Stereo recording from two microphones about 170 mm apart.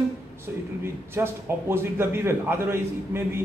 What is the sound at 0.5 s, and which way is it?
A man's voice, 10° right (ahead or behind).